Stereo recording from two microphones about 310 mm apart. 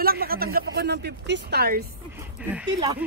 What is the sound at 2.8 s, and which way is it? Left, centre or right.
Speech, centre.